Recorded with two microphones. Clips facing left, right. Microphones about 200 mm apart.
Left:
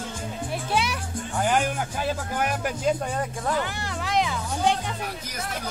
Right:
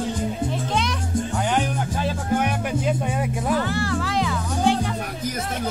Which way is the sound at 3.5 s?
15° left (ahead or behind).